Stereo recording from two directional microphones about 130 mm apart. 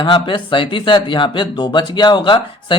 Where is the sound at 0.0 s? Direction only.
40° left (ahead or behind).